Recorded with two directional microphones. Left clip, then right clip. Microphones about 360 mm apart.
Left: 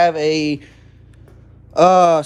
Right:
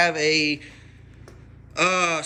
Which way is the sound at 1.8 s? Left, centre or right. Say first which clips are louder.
Left 11 dB; centre.